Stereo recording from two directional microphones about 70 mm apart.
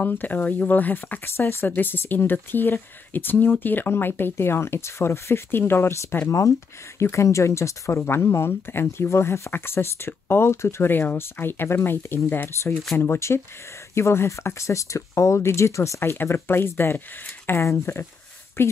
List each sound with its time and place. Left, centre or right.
0.0 s speech: left
1.2 s speech: left
8.0 s speech: left
16.0 s speech: left